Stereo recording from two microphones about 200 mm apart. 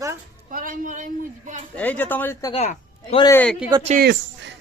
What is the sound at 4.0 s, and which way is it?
Speech, 60° right (ahead or behind).